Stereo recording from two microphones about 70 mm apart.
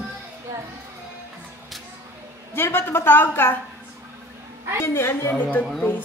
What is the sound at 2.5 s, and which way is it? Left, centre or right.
A woman's voice, left.